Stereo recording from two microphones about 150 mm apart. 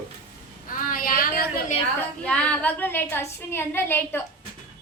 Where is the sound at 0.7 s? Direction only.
70° left (ahead or behind).